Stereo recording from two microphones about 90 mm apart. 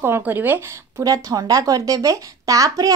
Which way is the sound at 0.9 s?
40° right (ahead or behind).